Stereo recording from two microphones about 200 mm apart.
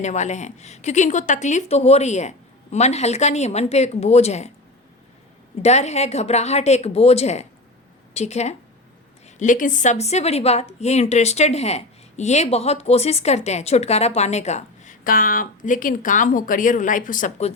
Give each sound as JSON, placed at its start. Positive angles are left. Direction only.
{"t": 0.0, "sound": "a woman's voice", "side_deg": 35}
{"t": 5.6, "sound": "a woman's voice", "side_deg": 35}